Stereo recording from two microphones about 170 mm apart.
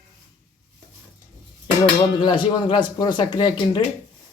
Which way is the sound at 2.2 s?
25° left (ahead or behind).